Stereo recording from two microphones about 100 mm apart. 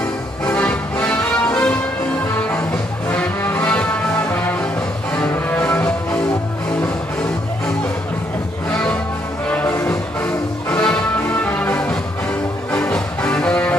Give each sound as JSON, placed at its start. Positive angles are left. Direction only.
{"t": 0.5, "sound": "music", "side_deg": 15}
{"t": 3.4, "sound": "music", "side_deg": 25}
{"t": 5.5, "sound": "music", "side_deg": 15}
{"t": 9.5, "sound": "music", "side_deg": 15}